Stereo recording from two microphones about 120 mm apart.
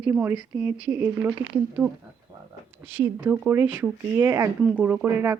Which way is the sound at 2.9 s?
15° right (ahead or behind).